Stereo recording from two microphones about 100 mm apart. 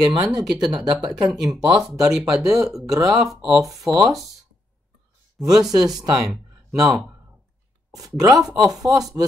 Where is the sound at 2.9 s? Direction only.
40° right (ahead or behind).